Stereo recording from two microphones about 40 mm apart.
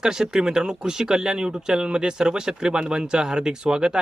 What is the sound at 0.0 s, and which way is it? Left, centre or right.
Speech, centre.